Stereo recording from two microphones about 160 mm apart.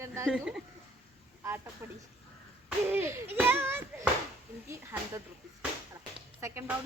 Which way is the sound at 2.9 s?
15° right (ahead or behind).